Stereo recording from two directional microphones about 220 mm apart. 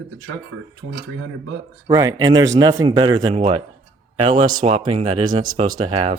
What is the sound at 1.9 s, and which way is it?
Speech, 15° right (ahead or behind).